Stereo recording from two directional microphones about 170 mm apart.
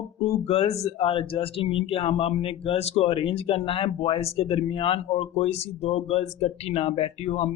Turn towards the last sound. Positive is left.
turn(degrees=40)  # may be behind; listen again after turning